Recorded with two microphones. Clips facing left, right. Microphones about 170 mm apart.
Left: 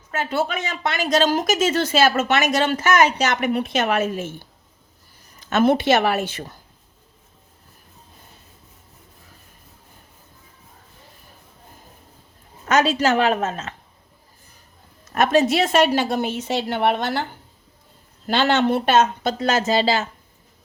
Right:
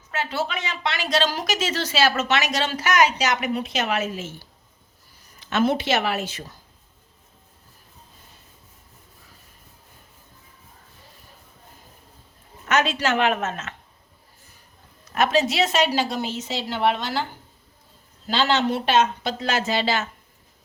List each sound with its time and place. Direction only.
0.1 s speech: 50° left (ahead or behind)
12.6 s a woman's voice: 40° left (ahead or behind)
15.1 s speech: 50° left (ahead or behind)
18.3 s speech: 55° left (ahead or behind); by 20.1 s 35° left (ahead or behind)